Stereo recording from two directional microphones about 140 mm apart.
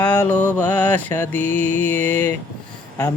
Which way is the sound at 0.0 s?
10° left (ahead or behind).